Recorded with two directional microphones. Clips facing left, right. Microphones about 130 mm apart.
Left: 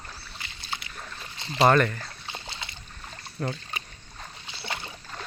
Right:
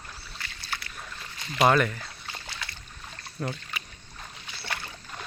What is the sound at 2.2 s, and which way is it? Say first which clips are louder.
Boat: even; 20° left (ahead or behind).